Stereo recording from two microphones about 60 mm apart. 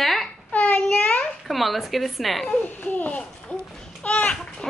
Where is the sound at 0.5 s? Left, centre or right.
Left.